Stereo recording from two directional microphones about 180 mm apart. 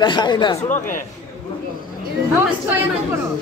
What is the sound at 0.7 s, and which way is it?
Speech, 45° left (ahead or behind).